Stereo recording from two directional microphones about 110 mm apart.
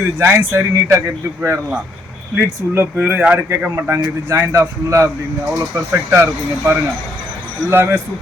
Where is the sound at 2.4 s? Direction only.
20° right (ahead or behind).